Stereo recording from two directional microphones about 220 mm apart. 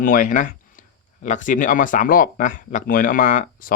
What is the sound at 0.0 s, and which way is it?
Speech, 35° left (ahead or behind).